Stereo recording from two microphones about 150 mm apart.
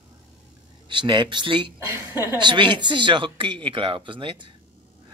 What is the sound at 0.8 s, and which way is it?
Speech, 30° right (ahead or behind).